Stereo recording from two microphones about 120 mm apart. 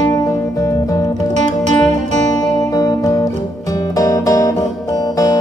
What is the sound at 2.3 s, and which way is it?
Music, 30° left (ahead or behind).